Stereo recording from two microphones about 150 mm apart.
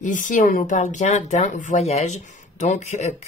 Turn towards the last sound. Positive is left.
turn(degrees=50)  # may be behind; listen again after turning